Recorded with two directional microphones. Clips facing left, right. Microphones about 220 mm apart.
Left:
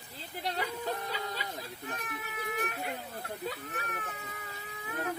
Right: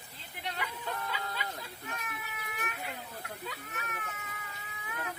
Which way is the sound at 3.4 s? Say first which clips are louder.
Left 6 dB; 35° left (ahead or behind).